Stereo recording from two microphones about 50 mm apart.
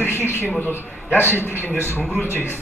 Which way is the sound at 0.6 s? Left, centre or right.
Left.